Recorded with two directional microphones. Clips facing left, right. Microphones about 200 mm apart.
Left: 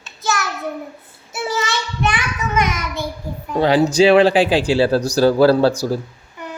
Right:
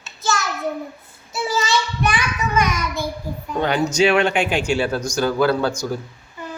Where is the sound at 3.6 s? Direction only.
30° left (ahead or behind).